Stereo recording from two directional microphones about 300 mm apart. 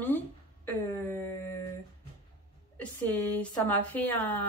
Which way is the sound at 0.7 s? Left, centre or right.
Centre.